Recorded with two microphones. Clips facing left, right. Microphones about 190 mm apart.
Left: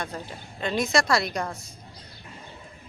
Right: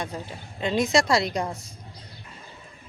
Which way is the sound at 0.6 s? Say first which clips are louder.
Right 2 dB; 20° right (ahead or behind).